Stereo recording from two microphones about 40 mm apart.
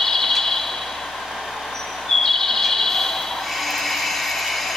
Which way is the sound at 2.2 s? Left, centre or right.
Centre.